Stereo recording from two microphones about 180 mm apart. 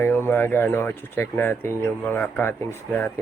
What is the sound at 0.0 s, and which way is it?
Speech, 10° left (ahead or behind).